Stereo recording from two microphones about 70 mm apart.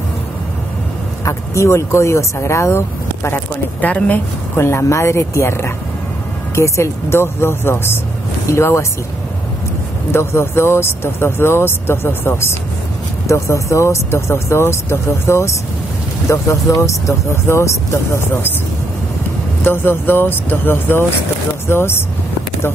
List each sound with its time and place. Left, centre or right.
1.2 s speech: left
3.3 s speech: left
4.6 s speech: left
10.1 s speech: left
13.3 s speech: left
19.6 s speech: left